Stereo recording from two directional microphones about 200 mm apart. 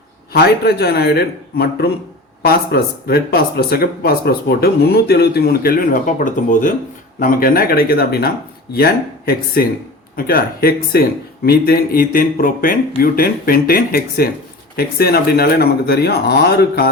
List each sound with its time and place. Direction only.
0.3 s speech: 55° left (ahead or behind)